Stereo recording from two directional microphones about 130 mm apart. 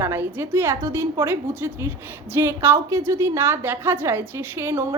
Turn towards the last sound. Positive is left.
turn(degrees=-20)  # may be behind; listen again after turning